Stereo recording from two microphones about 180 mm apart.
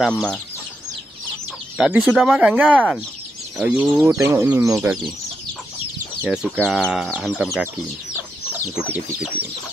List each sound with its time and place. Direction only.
0.0 s speech: centre (ahead or behind)
1.8 s speech: 5° right (ahead or behind)
6.2 s speech: 5° right (ahead or behind)
8.6 s speech: 5° right (ahead or behind)